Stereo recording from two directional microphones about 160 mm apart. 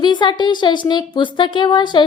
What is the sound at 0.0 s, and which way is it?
A woman's voice, 30° left (ahead or behind).